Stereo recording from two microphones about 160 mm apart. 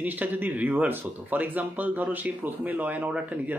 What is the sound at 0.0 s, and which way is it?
Speech, 10° right (ahead or behind).